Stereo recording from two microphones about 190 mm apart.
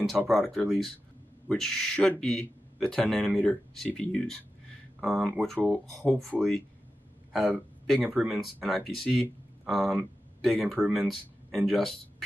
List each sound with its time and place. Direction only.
0.3 s speech: centre (ahead or behind)